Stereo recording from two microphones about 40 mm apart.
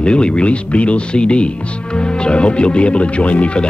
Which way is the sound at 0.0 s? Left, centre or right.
Left.